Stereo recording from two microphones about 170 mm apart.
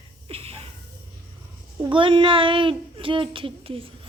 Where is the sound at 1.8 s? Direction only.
30° right (ahead or behind).